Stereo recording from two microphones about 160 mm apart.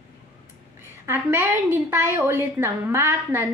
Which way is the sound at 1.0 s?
15° right (ahead or behind).